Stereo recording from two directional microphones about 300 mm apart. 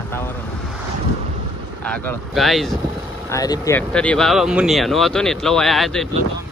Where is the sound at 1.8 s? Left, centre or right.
Centre.